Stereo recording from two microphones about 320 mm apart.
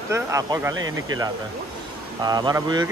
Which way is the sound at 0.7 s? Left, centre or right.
Right.